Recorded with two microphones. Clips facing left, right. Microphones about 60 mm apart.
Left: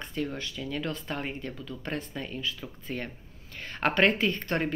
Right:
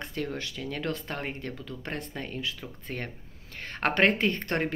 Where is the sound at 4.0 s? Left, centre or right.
Right.